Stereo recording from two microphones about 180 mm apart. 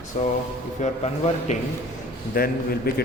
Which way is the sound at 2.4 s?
50° left (ahead or behind).